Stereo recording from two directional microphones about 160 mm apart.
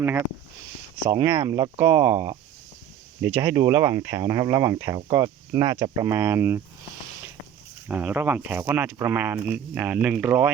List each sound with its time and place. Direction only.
1.0 s speech: 20° right (ahead or behind)
7.9 s speech: 10° right (ahead or behind)